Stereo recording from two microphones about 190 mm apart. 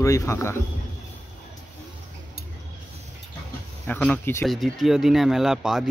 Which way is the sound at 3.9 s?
10° left (ahead or behind).